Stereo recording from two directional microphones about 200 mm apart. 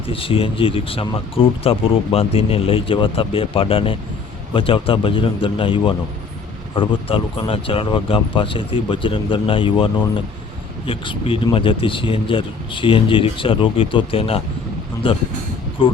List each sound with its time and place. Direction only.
0.1 s speech: 25° left (ahead or behind)